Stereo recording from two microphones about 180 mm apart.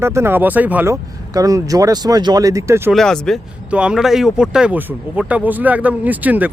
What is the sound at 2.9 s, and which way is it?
Speech, 5° left (ahead or behind).